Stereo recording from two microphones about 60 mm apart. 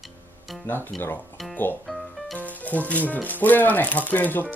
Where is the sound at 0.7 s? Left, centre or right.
Left.